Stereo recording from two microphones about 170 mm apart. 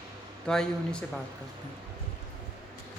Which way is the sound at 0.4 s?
5° left (ahead or behind).